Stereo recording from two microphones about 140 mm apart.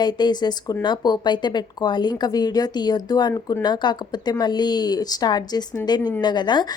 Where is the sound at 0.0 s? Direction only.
30° left (ahead or behind).